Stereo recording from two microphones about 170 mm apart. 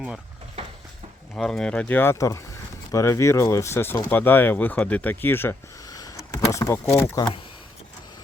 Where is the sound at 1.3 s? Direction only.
5° left (ahead or behind); by 7.4 s 20° left (ahead or behind).